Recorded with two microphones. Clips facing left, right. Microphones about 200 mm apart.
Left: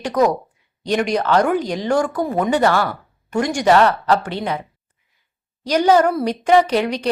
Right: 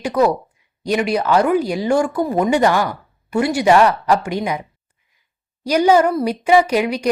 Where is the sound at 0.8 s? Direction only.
10° right (ahead or behind).